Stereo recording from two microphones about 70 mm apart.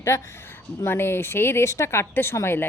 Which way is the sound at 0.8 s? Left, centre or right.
Left.